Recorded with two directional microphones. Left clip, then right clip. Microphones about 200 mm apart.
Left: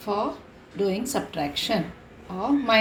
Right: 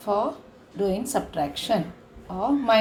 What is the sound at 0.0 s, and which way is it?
A woman's voice, 15° right (ahead or behind).